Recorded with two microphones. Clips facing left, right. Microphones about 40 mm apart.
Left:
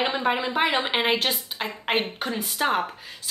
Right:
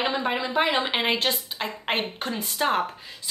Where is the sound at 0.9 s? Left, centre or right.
Centre.